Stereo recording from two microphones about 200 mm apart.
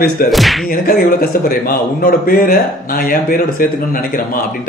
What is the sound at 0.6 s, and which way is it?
A man's voice, 45° left (ahead or behind).